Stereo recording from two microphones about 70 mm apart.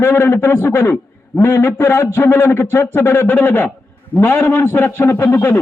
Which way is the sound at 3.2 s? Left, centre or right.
Left.